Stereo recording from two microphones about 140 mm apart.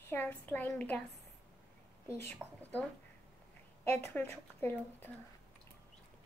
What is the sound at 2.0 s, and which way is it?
Speech, 15° left (ahead or behind).